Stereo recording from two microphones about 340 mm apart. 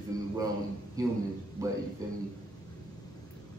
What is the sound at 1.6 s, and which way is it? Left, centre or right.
Speech, centre.